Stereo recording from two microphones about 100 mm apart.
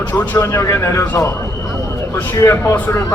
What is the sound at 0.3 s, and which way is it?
A man's voice, 35° left (ahead or behind).